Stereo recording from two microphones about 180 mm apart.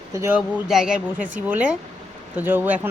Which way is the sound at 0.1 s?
15° right (ahead or behind).